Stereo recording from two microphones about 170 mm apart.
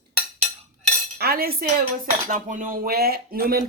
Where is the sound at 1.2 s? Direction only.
65° right (ahead or behind).